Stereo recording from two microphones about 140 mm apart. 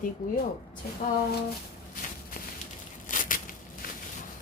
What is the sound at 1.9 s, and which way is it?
Walk, 85° left.